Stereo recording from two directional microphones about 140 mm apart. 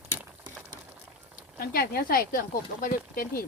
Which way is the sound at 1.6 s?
90° left.